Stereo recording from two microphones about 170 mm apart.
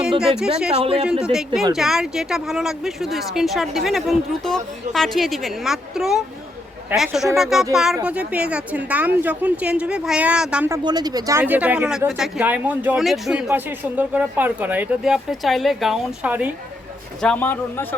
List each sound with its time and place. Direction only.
0.2 s speech: 5° right (ahead or behind)
0.7 s speech: 35° right (ahead or behind)
1.2 s speech: 5° right (ahead or behind)
10.7 s speech: 25° right (ahead or behind)
17.2 s a man's voice: 5° left (ahead or behind)